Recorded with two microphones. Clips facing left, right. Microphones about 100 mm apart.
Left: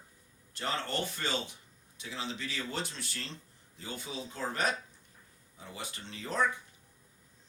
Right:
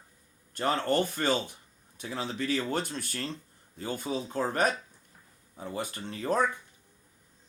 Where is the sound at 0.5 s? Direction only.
50° right (ahead or behind).